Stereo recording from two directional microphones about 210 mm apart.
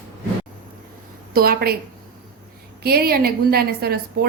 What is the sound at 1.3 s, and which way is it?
Speech, 45° right (ahead or behind).